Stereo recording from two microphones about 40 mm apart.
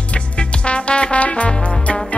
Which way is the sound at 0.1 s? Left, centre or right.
Left.